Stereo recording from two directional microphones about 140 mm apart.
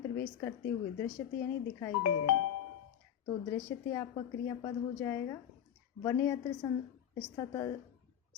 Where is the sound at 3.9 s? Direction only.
25° left (ahead or behind).